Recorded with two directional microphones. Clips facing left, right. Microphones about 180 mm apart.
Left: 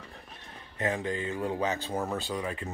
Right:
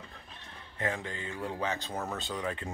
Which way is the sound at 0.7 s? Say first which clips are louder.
Left 5 dB; 20° left (ahead or behind).